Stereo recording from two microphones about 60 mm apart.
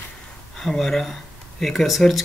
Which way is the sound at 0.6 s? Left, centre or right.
Centre.